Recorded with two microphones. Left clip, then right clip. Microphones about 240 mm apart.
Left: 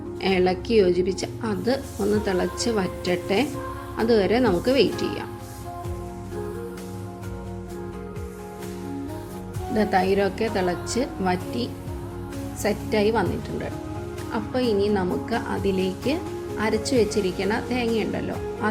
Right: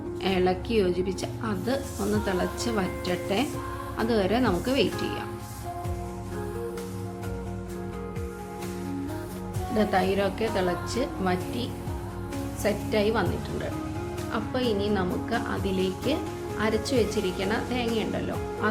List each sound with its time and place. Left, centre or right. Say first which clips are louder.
0.2 s speech: left 4 dB; centre
9.7 s speech: left 4 dB; centre
14.3 s speech: left 5 dB; centre